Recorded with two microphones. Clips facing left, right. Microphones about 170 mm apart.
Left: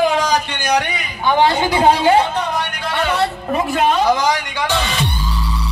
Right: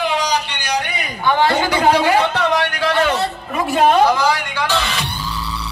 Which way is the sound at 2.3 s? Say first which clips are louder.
Right 3 dB; 80° right.